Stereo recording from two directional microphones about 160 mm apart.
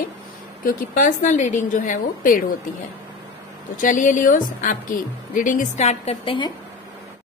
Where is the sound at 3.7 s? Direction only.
55° left (ahead or behind); by 6.5 s 35° left (ahead or behind).